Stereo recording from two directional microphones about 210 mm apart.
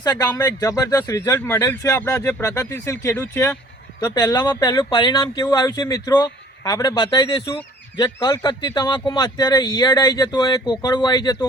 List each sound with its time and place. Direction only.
0.0 s speech: 20° left (ahead or behind)